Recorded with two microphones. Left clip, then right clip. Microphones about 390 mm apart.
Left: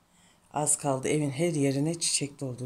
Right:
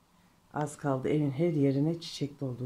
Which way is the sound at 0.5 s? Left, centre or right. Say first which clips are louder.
Left 4 dB; centre.